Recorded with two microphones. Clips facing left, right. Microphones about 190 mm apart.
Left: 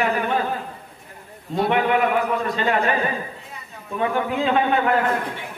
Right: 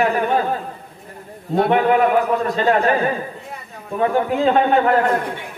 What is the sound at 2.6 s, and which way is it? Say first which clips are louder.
Speech: right 5 dB; 40° right (ahead or behind).